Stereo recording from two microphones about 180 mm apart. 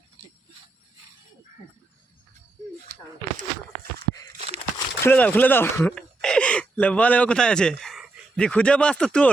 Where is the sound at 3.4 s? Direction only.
55° right (ahead or behind).